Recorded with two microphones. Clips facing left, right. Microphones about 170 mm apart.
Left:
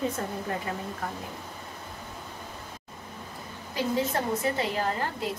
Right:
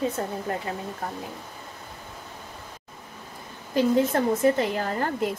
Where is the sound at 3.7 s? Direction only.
50° right (ahead or behind).